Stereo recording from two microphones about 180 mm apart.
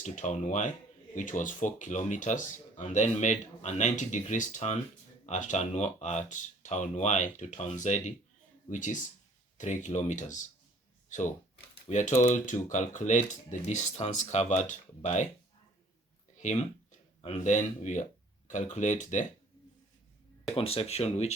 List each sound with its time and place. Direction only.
0.0 s speech: 45° left (ahead or behind)
11.9 s speech: 45° left (ahead or behind)
17.2 s speech: 35° left (ahead or behind)
20.5 s speech: 35° left (ahead or behind)